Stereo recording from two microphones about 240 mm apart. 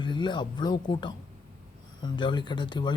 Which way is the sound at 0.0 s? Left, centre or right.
Centre.